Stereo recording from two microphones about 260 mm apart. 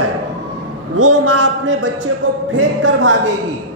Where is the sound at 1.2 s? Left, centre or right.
Right.